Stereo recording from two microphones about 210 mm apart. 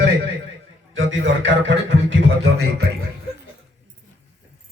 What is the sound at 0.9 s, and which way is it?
A man's voice, 60° right (ahead or behind).